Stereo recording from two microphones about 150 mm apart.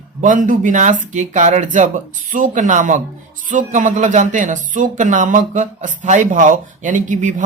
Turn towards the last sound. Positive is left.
turn(degrees=-55)  # may be behind; listen again after turning